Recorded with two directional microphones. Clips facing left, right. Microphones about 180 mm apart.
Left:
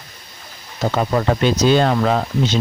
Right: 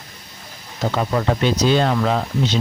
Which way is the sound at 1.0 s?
45° left (ahead or behind).